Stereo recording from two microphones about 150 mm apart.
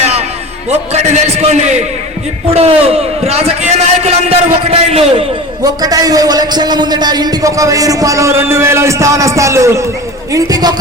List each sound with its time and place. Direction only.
0.7 s a man's voice: 45° right (ahead or behind)
5.6 s a man's voice: 25° right (ahead or behind)